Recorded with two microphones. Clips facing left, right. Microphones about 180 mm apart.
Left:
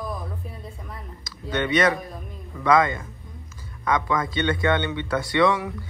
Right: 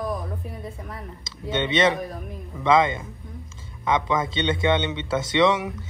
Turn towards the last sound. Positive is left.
turn(degrees=-20)  # may be behind; listen again after turning